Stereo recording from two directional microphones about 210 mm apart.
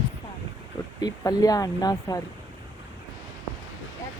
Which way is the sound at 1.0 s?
20° left (ahead or behind).